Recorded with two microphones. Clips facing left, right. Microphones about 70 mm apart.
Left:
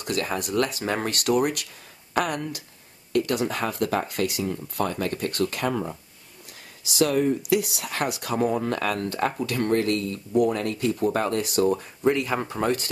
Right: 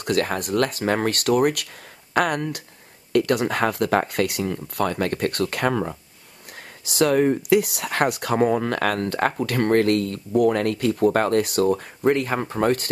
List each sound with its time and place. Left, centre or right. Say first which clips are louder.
0.0 s speech: right 4 dB; right